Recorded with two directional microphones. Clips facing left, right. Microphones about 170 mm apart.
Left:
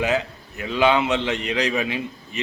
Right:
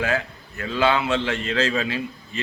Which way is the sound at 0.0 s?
20° left (ahead or behind).